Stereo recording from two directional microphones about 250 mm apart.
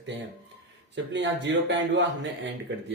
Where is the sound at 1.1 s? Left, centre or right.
Right.